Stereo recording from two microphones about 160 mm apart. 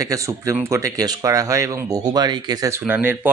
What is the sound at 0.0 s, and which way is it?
Speech, 20° right (ahead or behind).